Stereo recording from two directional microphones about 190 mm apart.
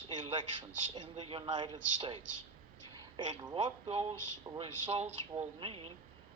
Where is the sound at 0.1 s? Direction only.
25° right (ahead or behind).